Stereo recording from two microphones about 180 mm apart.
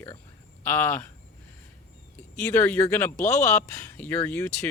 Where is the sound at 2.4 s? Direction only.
10° left (ahead or behind).